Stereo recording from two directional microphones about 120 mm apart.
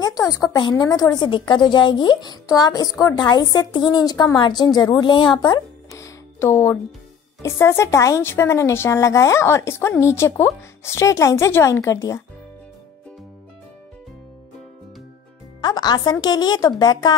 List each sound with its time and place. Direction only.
0.0 s a woman's voice: 30° left (ahead or behind)
5.9 s music: 25° left (ahead or behind)
7.4 s a woman's voice: 25° left (ahead or behind)
15.6 s a woman's voice: 35° left (ahead or behind)